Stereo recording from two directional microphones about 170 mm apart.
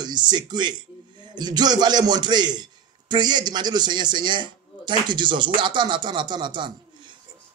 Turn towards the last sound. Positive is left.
turn(degrees=-25)  # may be behind; listen again after turning